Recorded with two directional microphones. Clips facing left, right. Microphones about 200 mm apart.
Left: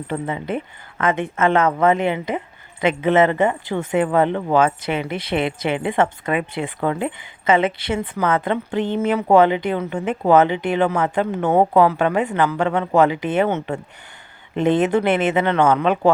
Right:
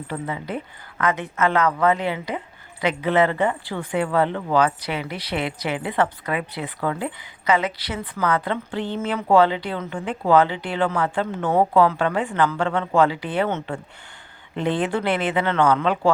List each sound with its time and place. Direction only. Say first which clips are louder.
0.1 s speech: left 4 dB; 25° left (ahead or behind)